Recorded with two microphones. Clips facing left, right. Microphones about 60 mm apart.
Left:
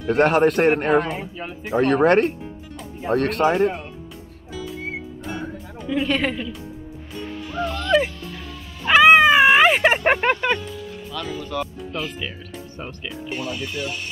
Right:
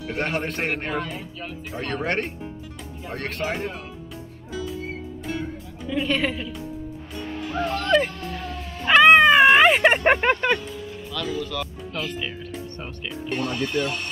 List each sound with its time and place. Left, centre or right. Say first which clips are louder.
0.1 s speech: left 11 dB; left
5.8 s speech: left 2 dB; centre
7.4 s music: right 1 dB; right
8.3 s dog: right 4 dB; right
8.8 s cat: left 1 dB; centre
11.1 s speech: left 1 dB; centre